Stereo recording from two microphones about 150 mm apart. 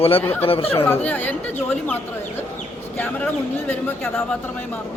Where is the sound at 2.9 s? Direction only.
10° left (ahead or behind).